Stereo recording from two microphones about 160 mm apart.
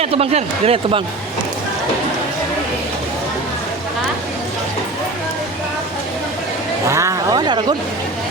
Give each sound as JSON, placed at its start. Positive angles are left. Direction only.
{"t": 0.0, "sound": "speech", "side_deg": -40}
{"t": 6.8, "sound": "speech", "side_deg": -20}